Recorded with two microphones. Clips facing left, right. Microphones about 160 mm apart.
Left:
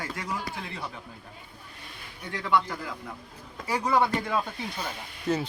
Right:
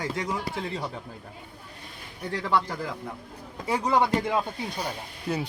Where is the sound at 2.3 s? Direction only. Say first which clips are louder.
Even; 35° right (ahead or behind).